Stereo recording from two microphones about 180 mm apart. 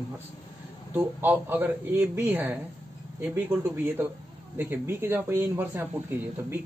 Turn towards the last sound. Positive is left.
turn(degrees=-10)  # may be behind; listen again after turning